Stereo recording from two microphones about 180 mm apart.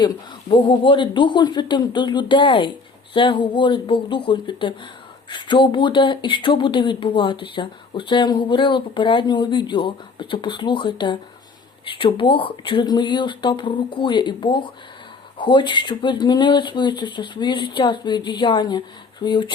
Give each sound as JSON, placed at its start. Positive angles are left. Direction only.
{"t": 0.0, "sound": "speech", "side_deg": 25}